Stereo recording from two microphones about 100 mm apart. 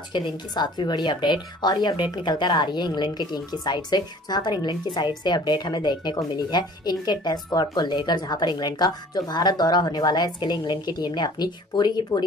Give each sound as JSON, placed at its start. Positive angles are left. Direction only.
{"t": 0.1, "sound": "a woman's voice", "side_deg": 45}